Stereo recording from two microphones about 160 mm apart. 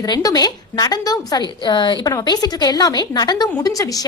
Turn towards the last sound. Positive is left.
turn(degrees=20)  # may be behind; listen again after turning